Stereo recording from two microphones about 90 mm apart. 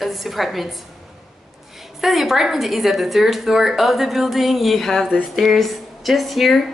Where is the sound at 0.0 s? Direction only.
Centre (ahead or behind).